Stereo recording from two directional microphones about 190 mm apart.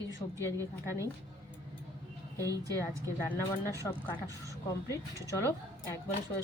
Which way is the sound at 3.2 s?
15° left (ahead or behind).